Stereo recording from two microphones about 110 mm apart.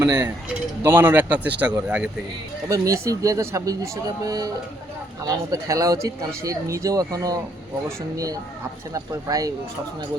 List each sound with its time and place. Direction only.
0.0 s speech: 25° right (ahead or behind)
2.6 s speech: 30° right (ahead or behind)